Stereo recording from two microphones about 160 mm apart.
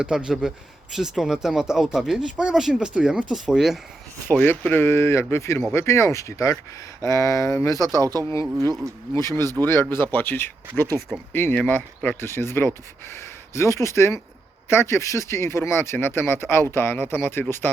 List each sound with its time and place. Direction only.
0.0 s speech: 5° right (ahead or behind)
4.3 s speech: 10° left (ahead or behind)
7.9 s speech: 20° right (ahead or behind)
9.1 s speech: 15° left (ahead or behind)